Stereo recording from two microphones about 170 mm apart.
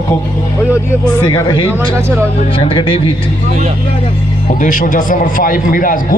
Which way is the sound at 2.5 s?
30° left (ahead or behind).